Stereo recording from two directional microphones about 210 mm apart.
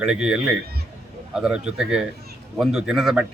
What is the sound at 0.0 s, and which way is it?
Speech, 5° right (ahead or behind).